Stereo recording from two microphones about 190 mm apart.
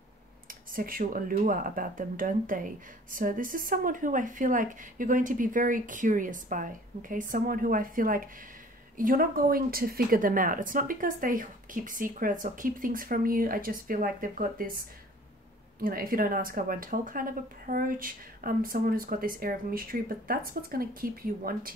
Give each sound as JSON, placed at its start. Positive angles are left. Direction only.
{"t": 0.7, "sound": "speech", "side_deg": -45}
{"t": 15.8, "sound": "speech", "side_deg": -50}